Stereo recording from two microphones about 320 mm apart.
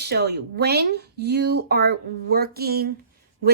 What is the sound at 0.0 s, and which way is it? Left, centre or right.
A woman's voice, right.